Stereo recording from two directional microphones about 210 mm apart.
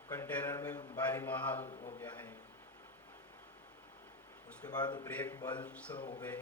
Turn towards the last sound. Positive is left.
turn(degrees=5)  # may be behind; listen again after turning